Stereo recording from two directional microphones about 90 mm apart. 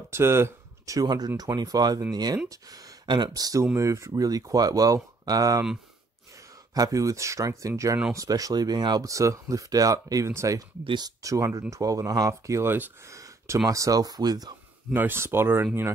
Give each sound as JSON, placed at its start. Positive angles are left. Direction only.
{"t": 0.1, "sound": "speech", "side_deg": -30}
{"t": 0.9, "sound": "speech", "side_deg": -45}
{"t": 6.7, "sound": "speech", "side_deg": -40}
{"t": 13.0, "sound": "a sound", "side_deg": -35}
{"t": 13.7, "sound": "speech", "side_deg": -40}
{"t": 15.0, "sound": "speech", "side_deg": -25}